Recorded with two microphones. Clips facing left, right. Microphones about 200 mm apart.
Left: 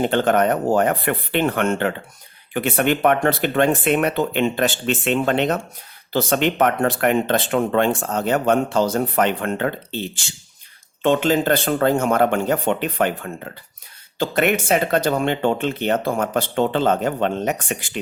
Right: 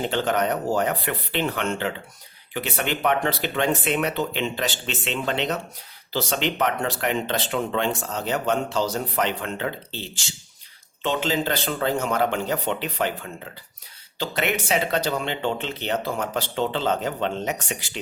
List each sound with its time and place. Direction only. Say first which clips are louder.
0.0 s speech: left 6 dB; 55° left (ahead or behind)